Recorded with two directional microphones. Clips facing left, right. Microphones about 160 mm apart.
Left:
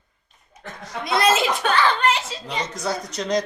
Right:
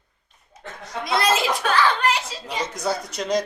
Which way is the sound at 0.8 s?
Centre (ahead or behind).